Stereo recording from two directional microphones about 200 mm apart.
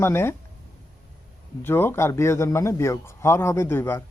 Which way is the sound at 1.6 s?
10° left (ahead or behind).